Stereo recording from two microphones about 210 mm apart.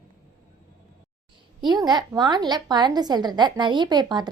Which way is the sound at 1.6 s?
20° right (ahead or behind).